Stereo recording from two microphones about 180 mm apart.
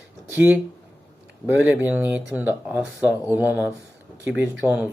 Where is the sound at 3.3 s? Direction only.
10° right (ahead or behind).